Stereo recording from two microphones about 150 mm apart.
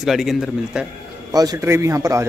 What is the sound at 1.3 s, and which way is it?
Speech, 20° right (ahead or behind).